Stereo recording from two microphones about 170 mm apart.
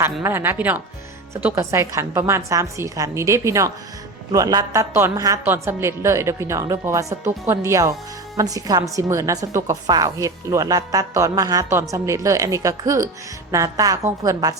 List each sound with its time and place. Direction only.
0.0 s a woman's voice: 15° right (ahead or behind)